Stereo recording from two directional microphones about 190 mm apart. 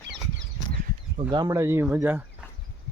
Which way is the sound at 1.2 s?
20° right (ahead or behind).